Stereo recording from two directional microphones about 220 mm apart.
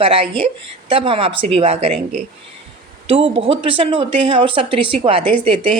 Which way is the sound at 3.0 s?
25° right (ahead or behind).